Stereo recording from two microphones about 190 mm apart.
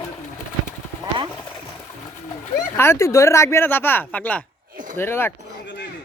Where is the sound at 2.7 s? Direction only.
15° left (ahead or behind).